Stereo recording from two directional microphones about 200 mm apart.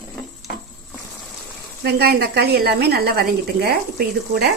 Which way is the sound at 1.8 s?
55° right (ahead or behind).